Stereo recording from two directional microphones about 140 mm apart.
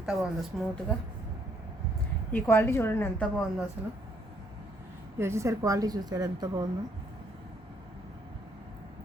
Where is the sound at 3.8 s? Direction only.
10° right (ahead or behind).